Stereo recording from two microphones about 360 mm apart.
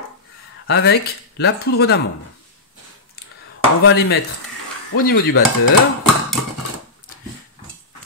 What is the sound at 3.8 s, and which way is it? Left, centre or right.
Speech, left.